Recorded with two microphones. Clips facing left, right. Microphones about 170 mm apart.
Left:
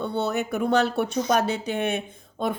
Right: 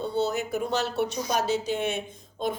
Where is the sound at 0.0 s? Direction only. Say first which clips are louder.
Left 1 dB; 60° left (ahead or behind).